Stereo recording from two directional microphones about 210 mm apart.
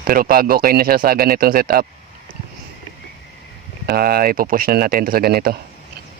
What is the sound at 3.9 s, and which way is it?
Speech, 45° right (ahead or behind).